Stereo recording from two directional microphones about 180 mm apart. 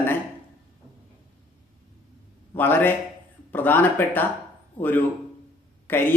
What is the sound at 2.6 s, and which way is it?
Speech, 10° left (ahead or behind).